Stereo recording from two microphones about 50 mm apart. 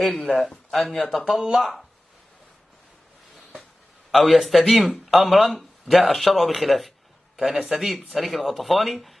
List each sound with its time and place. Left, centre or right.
0.1 s speech: left
0.4 s speech: centre
4.1 s speech: centre